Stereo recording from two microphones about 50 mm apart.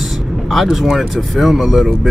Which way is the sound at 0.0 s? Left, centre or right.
Centre.